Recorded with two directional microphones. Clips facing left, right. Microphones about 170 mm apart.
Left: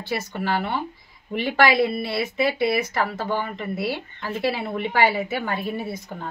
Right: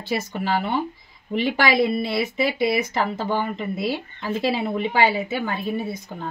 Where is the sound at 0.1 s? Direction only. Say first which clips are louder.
Right 2 dB; 20° right (ahead or behind).